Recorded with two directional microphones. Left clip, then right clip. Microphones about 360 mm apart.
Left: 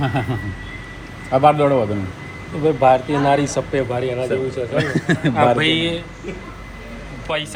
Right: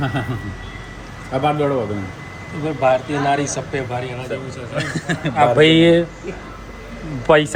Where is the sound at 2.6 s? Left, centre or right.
Centre.